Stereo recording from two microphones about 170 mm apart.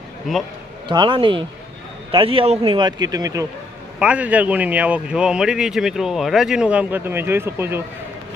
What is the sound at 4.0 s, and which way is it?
Speech, 10° right (ahead or behind).